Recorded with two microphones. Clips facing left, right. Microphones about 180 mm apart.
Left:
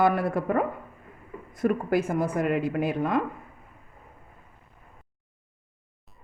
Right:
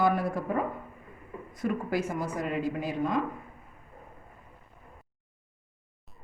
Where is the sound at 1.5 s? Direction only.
50° left (ahead or behind).